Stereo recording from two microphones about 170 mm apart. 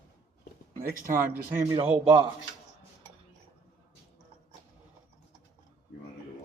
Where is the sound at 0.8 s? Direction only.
55° right (ahead or behind).